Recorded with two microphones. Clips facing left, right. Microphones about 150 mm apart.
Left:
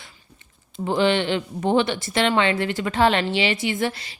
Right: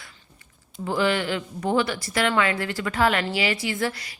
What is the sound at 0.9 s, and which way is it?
Speech, 25° left (ahead or behind).